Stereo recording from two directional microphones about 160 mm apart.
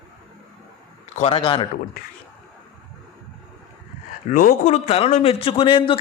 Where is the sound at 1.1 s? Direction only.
35° left (ahead or behind).